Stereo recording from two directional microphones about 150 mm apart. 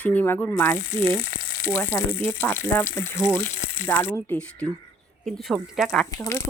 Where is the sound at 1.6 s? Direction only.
15° left (ahead or behind).